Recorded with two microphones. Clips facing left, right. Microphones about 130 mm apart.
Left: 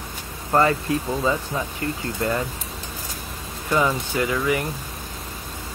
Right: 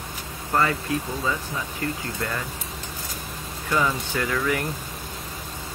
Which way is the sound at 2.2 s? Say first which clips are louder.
Left 7 dB; 25° left (ahead or behind).